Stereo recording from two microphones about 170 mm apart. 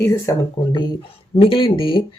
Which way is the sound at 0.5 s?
25° left (ahead or behind).